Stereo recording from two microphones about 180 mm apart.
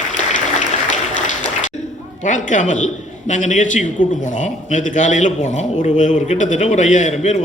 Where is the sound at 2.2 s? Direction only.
45° left (ahead or behind).